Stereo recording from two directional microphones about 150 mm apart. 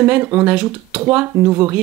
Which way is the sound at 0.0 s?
10° right (ahead or behind).